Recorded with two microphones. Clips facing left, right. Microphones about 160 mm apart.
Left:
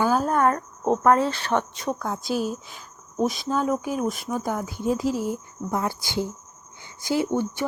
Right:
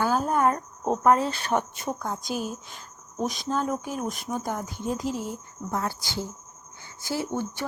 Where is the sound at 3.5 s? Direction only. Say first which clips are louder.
Left 4 dB; 10° left (ahead or behind).